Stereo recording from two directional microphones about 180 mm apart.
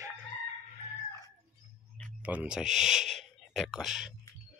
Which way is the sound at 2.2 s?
5° right (ahead or behind).